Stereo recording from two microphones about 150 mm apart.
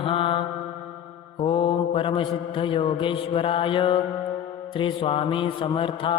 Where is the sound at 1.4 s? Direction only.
35° left (ahead or behind).